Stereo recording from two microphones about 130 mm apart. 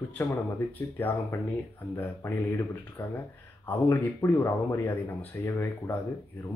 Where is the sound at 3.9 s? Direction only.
20° left (ahead or behind).